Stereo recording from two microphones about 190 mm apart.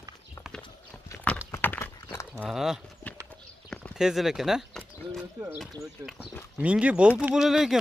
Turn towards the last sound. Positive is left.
turn(degrees=0)  # may be behind; listen again after turning